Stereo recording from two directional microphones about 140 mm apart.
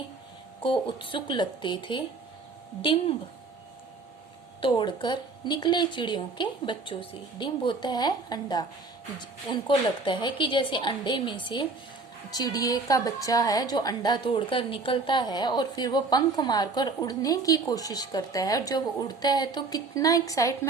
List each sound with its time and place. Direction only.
0.6 s a woman's voice: 35° left (ahead or behind)
4.6 s a woman's voice: 35° left (ahead or behind)